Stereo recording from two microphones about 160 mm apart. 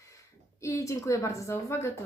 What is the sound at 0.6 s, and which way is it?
Speech, 20° left (ahead or behind).